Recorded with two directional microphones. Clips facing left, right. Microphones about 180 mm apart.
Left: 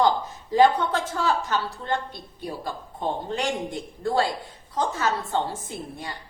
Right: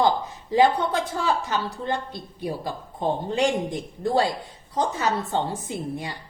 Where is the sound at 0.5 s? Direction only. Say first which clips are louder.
Even; 15° right (ahead or behind).